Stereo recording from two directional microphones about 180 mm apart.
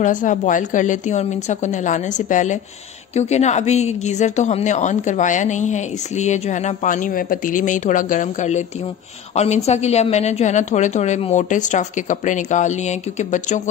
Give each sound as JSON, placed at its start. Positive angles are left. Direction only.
{"t": 0.0, "sound": "a woman's voice", "side_deg": 45}